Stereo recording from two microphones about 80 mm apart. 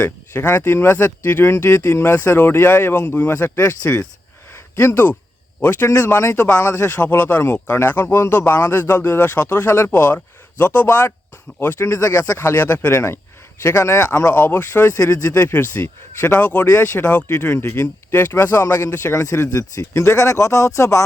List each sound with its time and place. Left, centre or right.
0.0 s speech: left
2.9 s speech: centre
4.5 s a sound: left
5.7 s speech: left
7.0 s speech: centre
9.9 s speech: left
11.9 s speech: left
12.4 s speech: left
14.3 s speech: left
16.6 s speech: left
17.0 s speech: centre
17.2 s speech: left
18.7 s speech: left